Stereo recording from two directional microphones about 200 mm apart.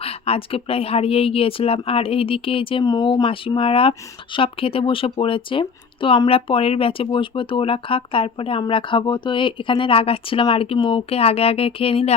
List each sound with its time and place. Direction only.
0.0 s speech: 30° left (ahead or behind)